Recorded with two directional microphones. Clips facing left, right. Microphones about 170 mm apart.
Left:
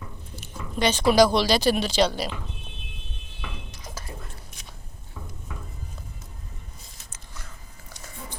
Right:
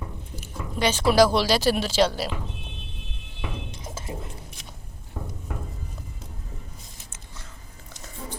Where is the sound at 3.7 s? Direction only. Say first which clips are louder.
Right 4 dB; 25° right (ahead or behind).